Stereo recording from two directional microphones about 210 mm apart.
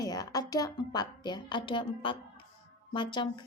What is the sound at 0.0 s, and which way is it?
A woman's voice, 15° left (ahead or behind).